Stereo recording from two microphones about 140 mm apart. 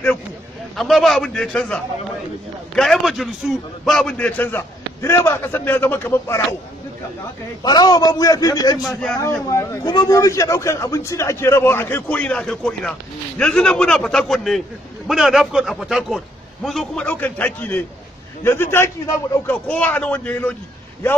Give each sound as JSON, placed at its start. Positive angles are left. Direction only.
{"t": 0.7, "sound": "a man's voice", "side_deg": 0}
{"t": 7.6, "sound": "a man's voice", "side_deg": 30}